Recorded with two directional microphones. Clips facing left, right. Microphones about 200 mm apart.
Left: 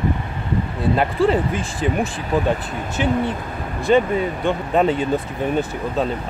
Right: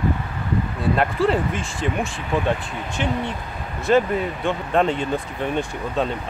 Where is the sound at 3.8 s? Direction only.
Centre (ahead or behind).